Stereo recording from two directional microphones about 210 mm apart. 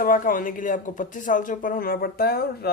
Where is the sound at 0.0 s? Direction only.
40° left (ahead or behind).